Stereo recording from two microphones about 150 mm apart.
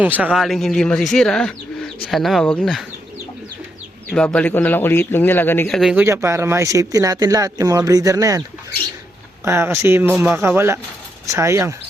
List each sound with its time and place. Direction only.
0.0 s speech: 10° right (ahead or behind); by 2.8 s 5° left (ahead or behind)
4.1 s speech: 5° left (ahead or behind)
5.6 s speech: centre (ahead or behind)
6.0 s a man's voice: 20° right (ahead or behind)